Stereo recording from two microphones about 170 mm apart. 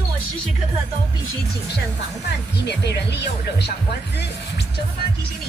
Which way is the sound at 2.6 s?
85° left.